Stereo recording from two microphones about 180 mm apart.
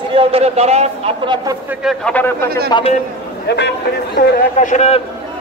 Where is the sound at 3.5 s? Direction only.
70° left (ahead or behind).